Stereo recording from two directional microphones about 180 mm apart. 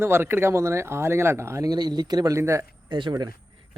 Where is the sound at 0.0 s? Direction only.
15° right (ahead or behind).